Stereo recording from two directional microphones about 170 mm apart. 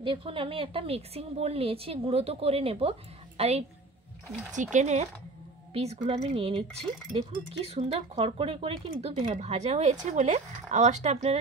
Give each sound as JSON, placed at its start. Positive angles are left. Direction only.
{"t": 0.0, "sound": "a woman's voice", "side_deg": -30}